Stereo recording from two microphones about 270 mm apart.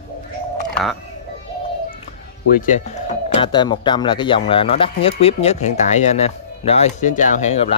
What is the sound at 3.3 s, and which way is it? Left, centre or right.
Speech, centre.